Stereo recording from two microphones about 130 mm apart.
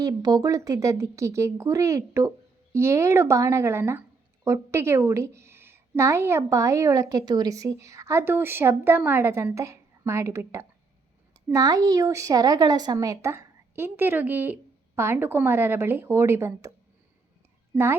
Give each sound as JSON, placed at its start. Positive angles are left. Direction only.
{"t": 0.0, "sound": "a woman's voice", "side_deg": -30}